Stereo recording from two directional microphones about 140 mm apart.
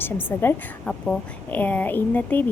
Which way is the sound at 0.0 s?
15° left (ahead or behind).